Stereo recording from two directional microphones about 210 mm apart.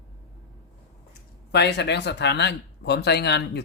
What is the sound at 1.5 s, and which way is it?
Speech, 55° left (ahead or behind).